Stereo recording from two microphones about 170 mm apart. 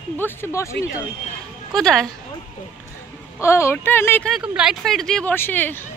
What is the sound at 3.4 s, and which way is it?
Speech, 15° left (ahead or behind).